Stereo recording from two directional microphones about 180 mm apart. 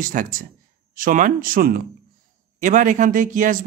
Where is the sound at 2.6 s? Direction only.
45° right (ahead or behind).